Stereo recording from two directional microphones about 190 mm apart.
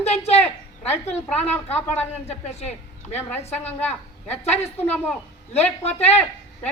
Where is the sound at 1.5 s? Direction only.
10° left (ahead or behind).